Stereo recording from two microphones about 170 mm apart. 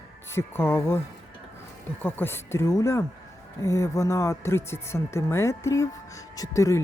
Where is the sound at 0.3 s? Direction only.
15° left (ahead or behind).